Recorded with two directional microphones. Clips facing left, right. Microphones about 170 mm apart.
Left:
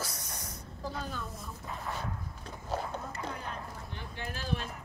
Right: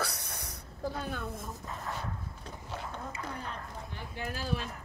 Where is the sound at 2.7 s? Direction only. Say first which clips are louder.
Left 7 dB; 40° left (ahead or behind).